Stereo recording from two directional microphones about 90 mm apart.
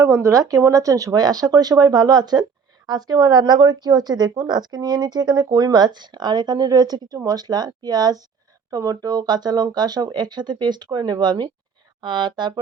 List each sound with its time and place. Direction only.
0.0 s speech: 30° right (ahead or behind); by 12.5 s 55° right (ahead or behind)